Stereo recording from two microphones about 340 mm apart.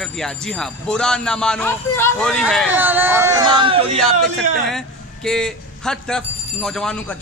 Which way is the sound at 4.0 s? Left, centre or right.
Centre.